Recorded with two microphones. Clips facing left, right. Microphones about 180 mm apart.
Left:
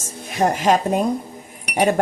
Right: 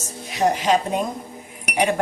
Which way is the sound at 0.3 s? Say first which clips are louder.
Left 2 dB; 50° left (ahead or behind).